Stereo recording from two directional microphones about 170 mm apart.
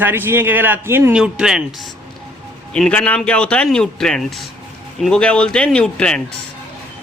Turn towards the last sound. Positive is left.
turn(degrees=5)  # may be behind; listen again after turning